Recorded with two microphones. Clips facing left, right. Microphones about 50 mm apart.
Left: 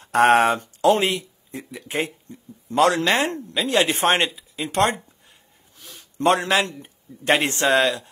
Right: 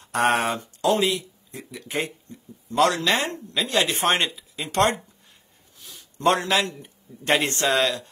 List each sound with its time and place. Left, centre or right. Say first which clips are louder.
0.0 s a man's voice: left 6 dB; left
4.4 s speech: left 1 dB; centre
5.8 s a sound: left 7 dB; left
6.2 s a man's voice: left 2 dB; centre
6.6 s a man's voice: left 2 dB; left